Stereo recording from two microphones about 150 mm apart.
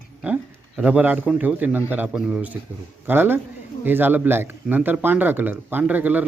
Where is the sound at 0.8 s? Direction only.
10° right (ahead or behind).